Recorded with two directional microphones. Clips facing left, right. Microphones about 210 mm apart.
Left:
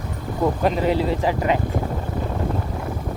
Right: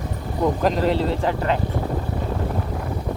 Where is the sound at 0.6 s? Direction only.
5° left (ahead or behind).